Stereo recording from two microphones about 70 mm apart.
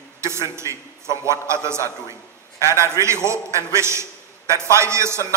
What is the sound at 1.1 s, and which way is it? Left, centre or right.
A man's voice, right.